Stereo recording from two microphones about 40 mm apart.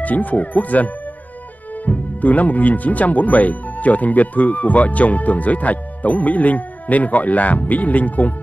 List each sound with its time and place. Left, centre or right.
0.0 s speech: left